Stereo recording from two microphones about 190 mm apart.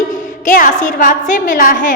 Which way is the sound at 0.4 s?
45° left (ahead or behind).